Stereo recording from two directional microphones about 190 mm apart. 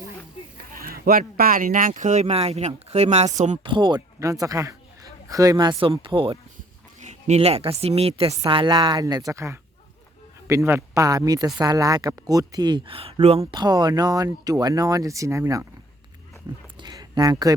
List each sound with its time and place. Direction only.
0.7 s speech: 50° right (ahead or behind)
3.6 s a man's voice: 25° right (ahead or behind)
7.0 s speech: 35° right (ahead or behind); by 15.6 s 15° right (ahead or behind)
16.8 s a sound: 20° right (ahead or behind)